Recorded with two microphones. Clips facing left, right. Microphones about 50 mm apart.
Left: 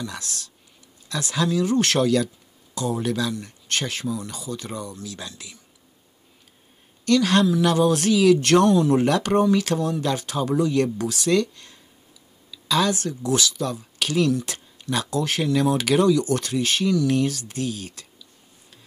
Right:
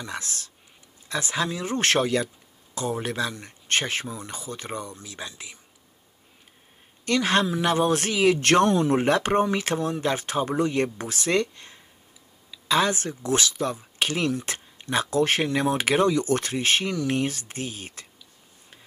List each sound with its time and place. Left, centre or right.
0.0 s speech: right
7.1 s speech: right